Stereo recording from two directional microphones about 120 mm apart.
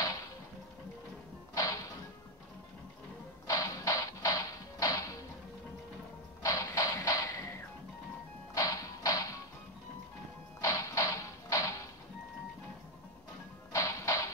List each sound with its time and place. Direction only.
1.5 s music: 30° left (ahead or behind)
3.4 s music: 30° left (ahead or behind)
6.4 s a sound: 30° left (ahead or behind)
8.5 s music: 30° left (ahead or behind)
10.6 s music: 30° left (ahead or behind)
13.7 s music: 25° left (ahead or behind)